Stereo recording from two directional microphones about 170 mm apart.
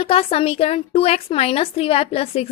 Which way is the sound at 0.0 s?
35° left (ahead or behind).